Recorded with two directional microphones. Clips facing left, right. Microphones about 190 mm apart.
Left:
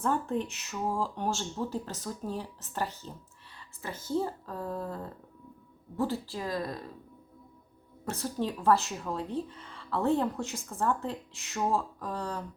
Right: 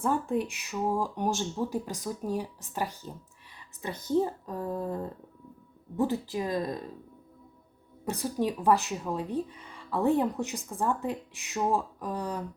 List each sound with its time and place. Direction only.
0.0 s speech: 10° right (ahead or behind)
8.0 s speech: 15° right (ahead or behind)